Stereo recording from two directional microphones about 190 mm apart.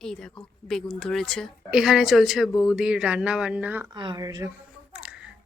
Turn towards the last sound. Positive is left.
turn(degrees=-5)  # may be behind; listen again after turning